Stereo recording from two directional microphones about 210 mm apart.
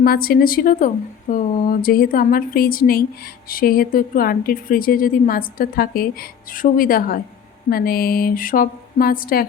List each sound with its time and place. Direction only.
0.0 s a woman's voice: 45° left (ahead or behind)